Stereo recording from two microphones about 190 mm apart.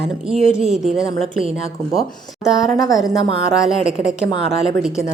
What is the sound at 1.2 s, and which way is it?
Speech, 30° right (ahead or behind).